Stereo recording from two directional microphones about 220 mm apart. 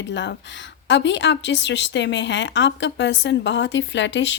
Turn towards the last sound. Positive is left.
turn(degrees=55)  # may be behind; listen again after turning